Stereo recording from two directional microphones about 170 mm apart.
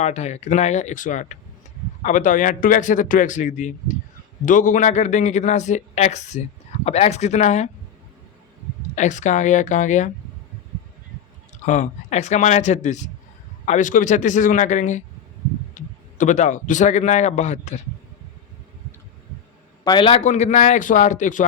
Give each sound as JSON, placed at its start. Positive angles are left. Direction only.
{"t": 0.0, "sound": "a man's voice", "side_deg": 40}
{"t": 9.0, "sound": "a man's voice", "side_deg": 45}
{"t": 11.6, "sound": "a man's voice", "side_deg": 45}
{"t": 19.8, "sound": "a man's voice", "side_deg": 25}
{"t": 20.2, "sound": "a man's voice", "side_deg": 45}